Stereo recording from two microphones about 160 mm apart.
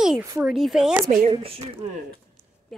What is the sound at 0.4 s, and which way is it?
Speech, centre (ahead or behind).